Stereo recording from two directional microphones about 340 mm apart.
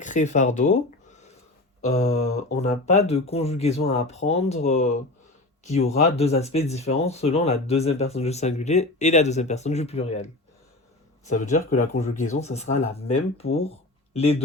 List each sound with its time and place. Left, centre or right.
0.0 s speech: left
2.5 s speech: centre
11.3 s speech: left